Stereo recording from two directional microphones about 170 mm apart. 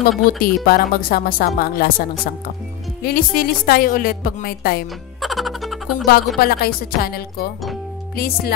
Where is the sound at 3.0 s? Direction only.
60° left (ahead or behind).